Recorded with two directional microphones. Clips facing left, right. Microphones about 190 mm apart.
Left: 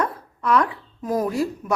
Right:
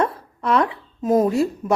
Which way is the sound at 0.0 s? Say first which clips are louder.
Right 3 dB; 25° right (ahead or behind).